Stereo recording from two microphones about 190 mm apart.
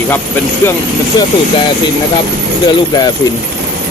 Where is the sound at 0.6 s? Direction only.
15° left (ahead or behind).